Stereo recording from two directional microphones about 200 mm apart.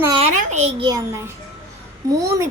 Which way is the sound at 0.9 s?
15° right (ahead or behind).